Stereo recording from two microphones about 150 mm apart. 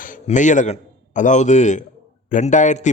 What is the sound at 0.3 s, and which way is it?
A man's voice, 55° left (ahead or behind).